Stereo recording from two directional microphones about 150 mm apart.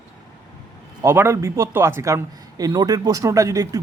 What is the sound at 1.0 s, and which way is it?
Speech, 15° right (ahead or behind).